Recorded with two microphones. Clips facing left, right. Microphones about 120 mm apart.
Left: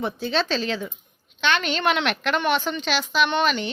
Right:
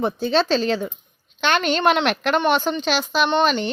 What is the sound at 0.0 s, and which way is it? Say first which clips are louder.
A woman's voice: right 5 dB; 35° right (ahead or behind).